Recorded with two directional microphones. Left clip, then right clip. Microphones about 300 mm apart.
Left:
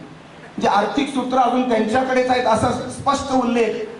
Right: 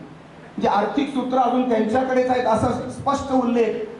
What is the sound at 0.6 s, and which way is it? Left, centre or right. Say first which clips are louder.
A man's voice: left 2 dB; centre.